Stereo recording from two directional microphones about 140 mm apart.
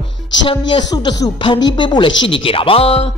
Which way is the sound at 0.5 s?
35° left (ahead or behind).